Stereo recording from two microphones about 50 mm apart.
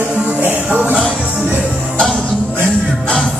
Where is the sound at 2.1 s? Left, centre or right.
Centre.